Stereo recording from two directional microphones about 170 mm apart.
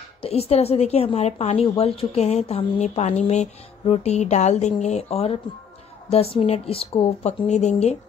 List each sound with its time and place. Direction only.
0.2 s a woman's voice: 35° left (ahead or behind)